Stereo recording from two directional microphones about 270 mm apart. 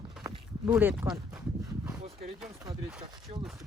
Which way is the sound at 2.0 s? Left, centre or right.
Right.